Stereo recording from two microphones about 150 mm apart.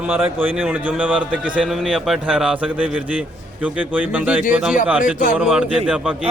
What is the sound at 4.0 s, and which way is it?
Speech, 10° right (ahead or behind).